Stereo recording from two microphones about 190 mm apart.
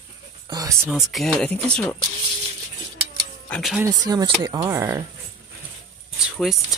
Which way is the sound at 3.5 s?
Centre (ahead or behind).